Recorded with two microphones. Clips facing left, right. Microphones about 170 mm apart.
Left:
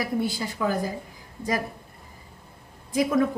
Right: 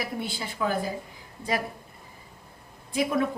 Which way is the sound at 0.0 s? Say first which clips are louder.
Left 6 dB; 45° left (ahead or behind).